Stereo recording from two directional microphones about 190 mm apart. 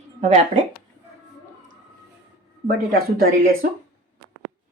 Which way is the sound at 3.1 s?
50° right (ahead or behind).